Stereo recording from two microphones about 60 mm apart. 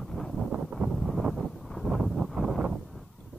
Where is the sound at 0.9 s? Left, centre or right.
Centre.